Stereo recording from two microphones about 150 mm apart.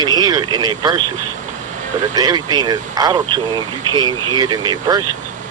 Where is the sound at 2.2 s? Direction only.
25° right (ahead or behind).